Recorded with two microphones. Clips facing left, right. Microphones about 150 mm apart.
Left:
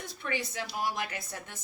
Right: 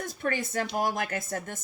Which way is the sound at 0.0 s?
45° right (ahead or behind).